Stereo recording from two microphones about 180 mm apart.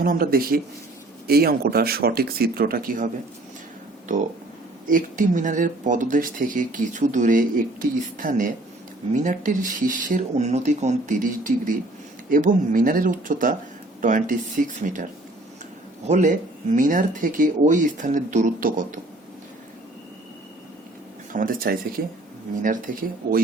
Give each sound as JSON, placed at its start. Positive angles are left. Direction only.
{"t": 0.0, "sound": "speech", "side_deg": -55}
{"t": 4.9, "sound": "speech", "side_deg": -50}
{"t": 21.3, "sound": "speech", "side_deg": -55}